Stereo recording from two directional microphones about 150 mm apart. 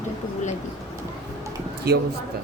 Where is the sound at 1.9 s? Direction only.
90° right.